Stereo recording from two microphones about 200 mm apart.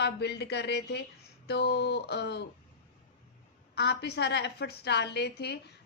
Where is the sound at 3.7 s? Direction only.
55° left (ahead or behind).